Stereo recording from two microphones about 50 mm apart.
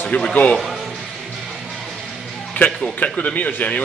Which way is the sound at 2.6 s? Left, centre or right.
Left.